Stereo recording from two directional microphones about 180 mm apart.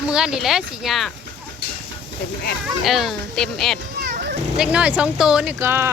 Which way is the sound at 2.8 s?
Centre (ahead or behind).